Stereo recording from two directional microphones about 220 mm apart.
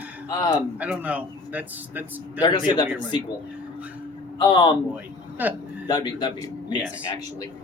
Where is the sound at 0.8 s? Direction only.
5° right (ahead or behind).